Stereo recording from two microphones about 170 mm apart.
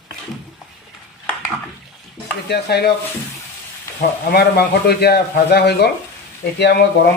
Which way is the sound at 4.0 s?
65° left (ahead or behind).